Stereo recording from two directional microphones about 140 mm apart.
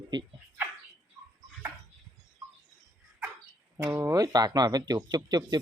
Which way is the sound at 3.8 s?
20° right (ahead or behind).